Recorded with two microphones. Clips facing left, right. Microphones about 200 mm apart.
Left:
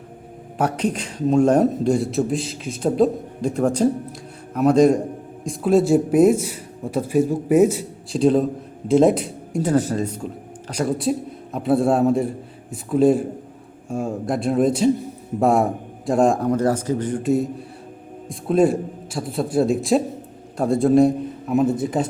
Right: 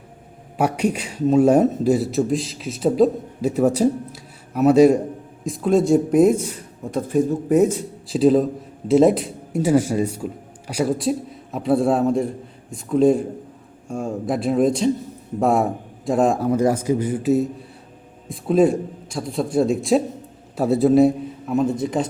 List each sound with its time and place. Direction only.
0.6 s a man's voice: 10° right (ahead or behind)